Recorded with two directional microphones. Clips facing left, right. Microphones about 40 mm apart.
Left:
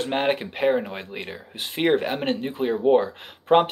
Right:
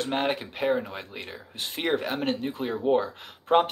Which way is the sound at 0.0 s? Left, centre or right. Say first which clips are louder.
Left 4 dB; left.